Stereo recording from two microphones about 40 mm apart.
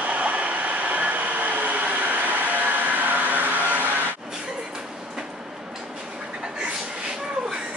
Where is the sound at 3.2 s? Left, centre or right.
Right.